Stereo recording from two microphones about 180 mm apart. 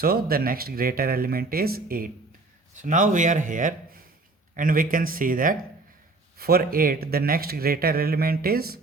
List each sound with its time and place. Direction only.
0.0 s a man's voice: 55° right (ahead or behind)
2.7 s a man's voice: 45° right (ahead or behind)